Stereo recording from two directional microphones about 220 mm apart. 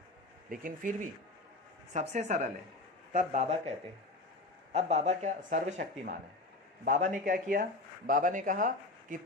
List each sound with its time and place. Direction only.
0.5 s speech: 35° right (ahead or behind)